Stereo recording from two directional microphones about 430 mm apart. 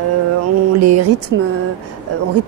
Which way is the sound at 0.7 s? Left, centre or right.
Right.